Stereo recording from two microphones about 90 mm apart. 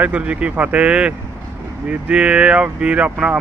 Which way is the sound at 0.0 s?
15° right (ahead or behind).